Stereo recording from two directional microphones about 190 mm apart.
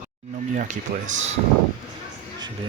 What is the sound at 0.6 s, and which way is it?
Speech, 40° right (ahead or behind).